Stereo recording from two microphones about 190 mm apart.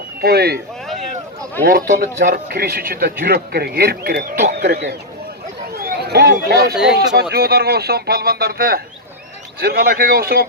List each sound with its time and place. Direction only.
0.2 s speech: 55° right (ahead or behind)
1.9 s a man's voice: 45° right (ahead or behind)
4.5 s a man's voice: 55° right (ahead or behind)